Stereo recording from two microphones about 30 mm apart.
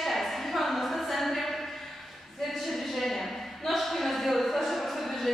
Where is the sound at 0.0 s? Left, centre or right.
Centre.